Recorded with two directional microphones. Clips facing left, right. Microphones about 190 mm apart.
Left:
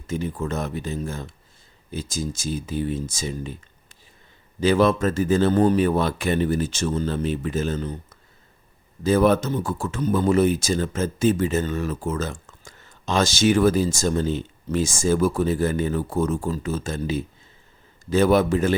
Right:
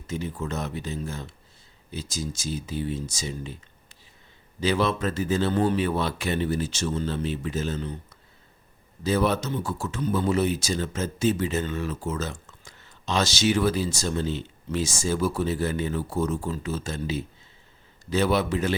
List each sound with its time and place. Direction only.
0.1 s speech: 50° left (ahead or behind)